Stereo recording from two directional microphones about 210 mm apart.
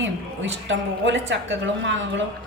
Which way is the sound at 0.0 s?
65° right (ahead or behind).